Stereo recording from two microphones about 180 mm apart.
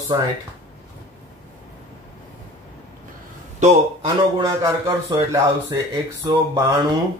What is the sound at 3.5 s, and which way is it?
Speech, 40° right (ahead or behind).